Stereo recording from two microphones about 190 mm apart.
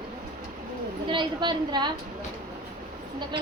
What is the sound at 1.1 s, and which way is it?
Speech, 25° right (ahead or behind).